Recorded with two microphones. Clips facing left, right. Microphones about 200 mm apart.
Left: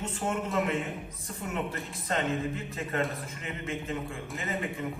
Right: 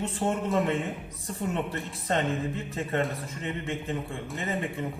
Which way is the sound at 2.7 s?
30° right (ahead or behind).